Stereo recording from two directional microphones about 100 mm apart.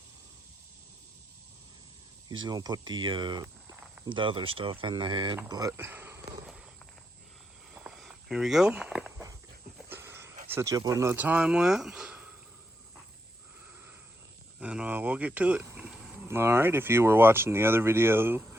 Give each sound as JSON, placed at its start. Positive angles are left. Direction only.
{"t": 2.3, "sound": "speech", "side_deg": -45}
{"t": 5.5, "sound": "speech", "side_deg": -40}
{"t": 5.7, "sound": "speech", "side_deg": -20}
{"t": 7.7, "sound": "walk", "side_deg": -10}
{"t": 9.9, "sound": "a sound", "side_deg": -25}
{"t": 10.5, "sound": "speech", "side_deg": -30}
{"t": 11.2, "sound": "speech", "side_deg": -10}
{"t": 14.6, "sound": "speech", "side_deg": -10}
{"t": 16.2, "sound": "speech", "side_deg": -25}